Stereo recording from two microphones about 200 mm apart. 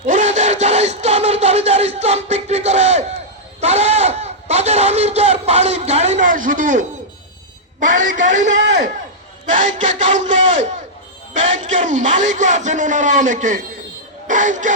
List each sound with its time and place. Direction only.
0.0 s battle cry: 35° right (ahead or behind)
3.6 s a sound: 35° right (ahead or behind)
7.9 s a man's voice: 40° right (ahead or behind)